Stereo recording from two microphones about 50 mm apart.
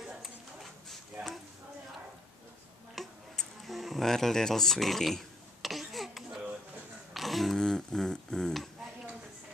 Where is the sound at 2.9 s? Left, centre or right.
Centre.